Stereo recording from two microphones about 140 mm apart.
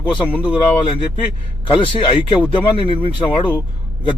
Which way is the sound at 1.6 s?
35° left (ahead or behind).